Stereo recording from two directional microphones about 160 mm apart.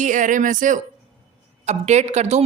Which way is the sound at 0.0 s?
55° right (ahead or behind).